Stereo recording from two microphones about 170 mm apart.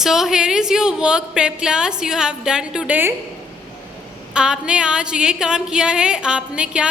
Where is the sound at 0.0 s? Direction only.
Centre (ahead or behind).